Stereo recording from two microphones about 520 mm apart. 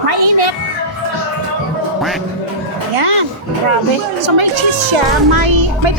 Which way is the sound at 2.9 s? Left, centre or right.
Right.